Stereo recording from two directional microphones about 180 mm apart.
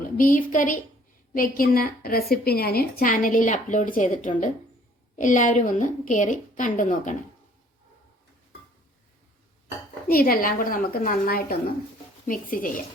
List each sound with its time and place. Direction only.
0.2 s a woman's voice: 50° left (ahead or behind)
10.1 s a woman's voice: 55° left (ahead or behind)